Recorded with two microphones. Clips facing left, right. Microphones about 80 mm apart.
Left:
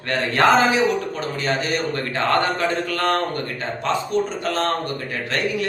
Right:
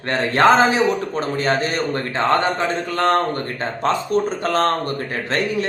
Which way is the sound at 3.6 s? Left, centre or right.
Right.